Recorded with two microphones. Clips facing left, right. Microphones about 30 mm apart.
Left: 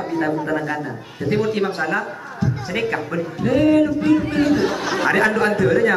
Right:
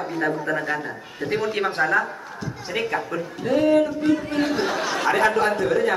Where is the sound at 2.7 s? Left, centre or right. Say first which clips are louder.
Even; centre.